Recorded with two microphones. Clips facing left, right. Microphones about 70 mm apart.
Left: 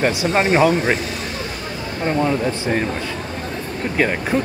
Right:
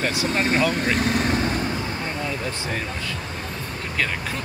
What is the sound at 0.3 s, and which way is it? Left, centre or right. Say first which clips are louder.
Speech: left 6 dB; left.